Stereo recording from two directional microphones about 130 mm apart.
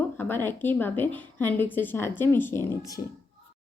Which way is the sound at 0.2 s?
15° left (ahead or behind).